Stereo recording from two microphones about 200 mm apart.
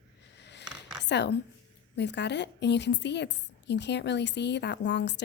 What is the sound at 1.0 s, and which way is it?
A woman's voice, 60° left (ahead or behind).